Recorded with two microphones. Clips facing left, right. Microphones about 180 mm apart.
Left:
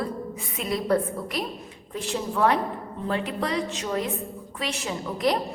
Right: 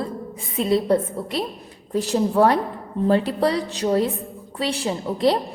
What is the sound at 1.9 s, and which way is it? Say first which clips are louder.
A woman's voice: right 9 dB; 40° right (ahead or behind).